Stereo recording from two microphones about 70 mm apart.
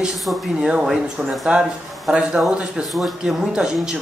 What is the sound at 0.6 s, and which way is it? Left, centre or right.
Speech, centre.